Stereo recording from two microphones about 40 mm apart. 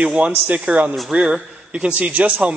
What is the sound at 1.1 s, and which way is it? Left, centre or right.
Speech, centre.